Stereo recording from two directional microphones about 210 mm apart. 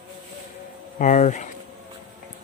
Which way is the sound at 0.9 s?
35° left (ahead or behind).